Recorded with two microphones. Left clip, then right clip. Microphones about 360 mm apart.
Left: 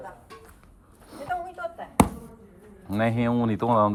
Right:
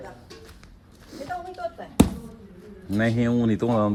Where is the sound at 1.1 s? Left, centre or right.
Centre.